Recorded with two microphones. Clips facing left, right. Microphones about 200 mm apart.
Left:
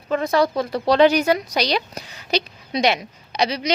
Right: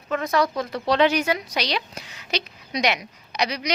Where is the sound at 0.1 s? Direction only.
30° left (ahead or behind).